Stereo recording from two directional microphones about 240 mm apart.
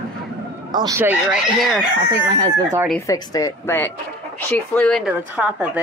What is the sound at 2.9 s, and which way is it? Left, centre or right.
Speech, centre.